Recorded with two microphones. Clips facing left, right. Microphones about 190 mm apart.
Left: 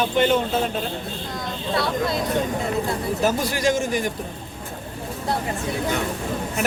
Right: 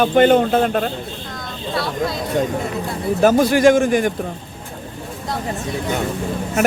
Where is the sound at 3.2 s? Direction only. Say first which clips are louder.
Right 10 dB; 55° right (ahead or behind).